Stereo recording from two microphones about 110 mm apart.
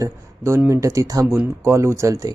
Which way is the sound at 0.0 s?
25° right (ahead or behind).